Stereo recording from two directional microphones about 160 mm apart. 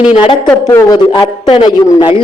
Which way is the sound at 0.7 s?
20° left (ahead or behind).